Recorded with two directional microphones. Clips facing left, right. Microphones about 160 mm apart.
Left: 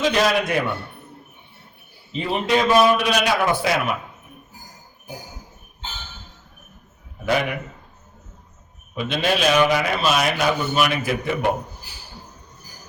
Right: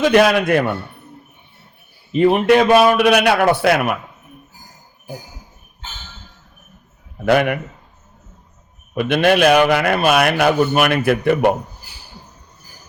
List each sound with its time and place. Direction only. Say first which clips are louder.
0.0 s a man's voice: right 6 dB; 60° right (ahead or behind)
2.1 s a man's voice: right 9 dB; 60° right (ahead or behind)
7.3 s a man's voice: right 7 dB; 60° right (ahead or behind)
9.0 s a man's voice: right 8 dB; 60° right (ahead or behind)